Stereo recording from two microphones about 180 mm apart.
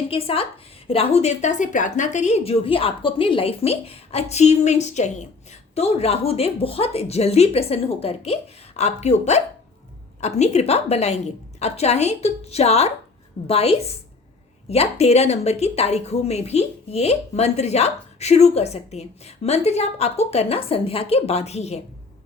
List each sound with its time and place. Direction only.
0.1 s a woman's voice: 30° left (ahead or behind)